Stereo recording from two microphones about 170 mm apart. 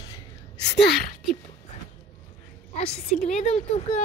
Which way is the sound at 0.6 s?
75° left (ahead or behind).